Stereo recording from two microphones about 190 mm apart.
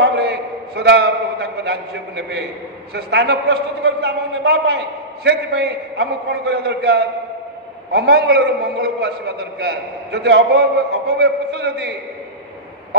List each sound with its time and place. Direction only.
0.0 s a man's voice: 60° right (ahead or behind)